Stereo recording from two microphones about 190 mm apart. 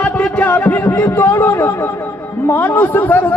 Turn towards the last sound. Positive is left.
turn(degrees=10)  # may be behind; listen again after turning